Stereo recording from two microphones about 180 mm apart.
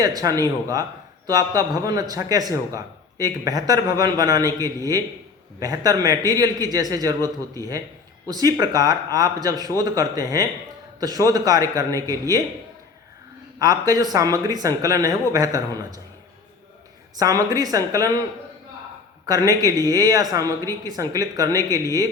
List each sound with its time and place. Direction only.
0.0 s a man's voice: 20° right (ahead or behind)
8.3 s a man's voice: 20° right (ahead or behind)
11.9 s speech: 15° left (ahead or behind)
13.6 s a man's voice: 20° right (ahead or behind)
17.2 s a man's voice: 20° right (ahead or behind)
19.2 s a man's voice: 20° right (ahead or behind)